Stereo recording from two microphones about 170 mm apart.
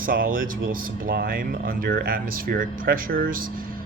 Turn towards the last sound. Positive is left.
turn(degrees=-60)  # may be behind; listen again after turning